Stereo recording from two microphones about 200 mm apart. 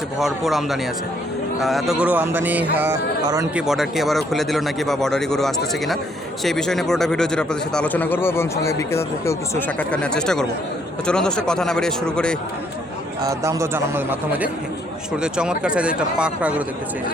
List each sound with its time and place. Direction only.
0.2 s speech: centre (ahead or behind)
13.2 s speech: 15° right (ahead or behind)